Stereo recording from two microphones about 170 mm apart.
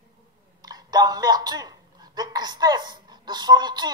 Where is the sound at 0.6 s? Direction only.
25° right (ahead or behind).